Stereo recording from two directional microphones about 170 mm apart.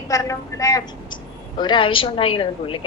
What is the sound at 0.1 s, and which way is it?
A woman's voice, 20° left (ahead or behind).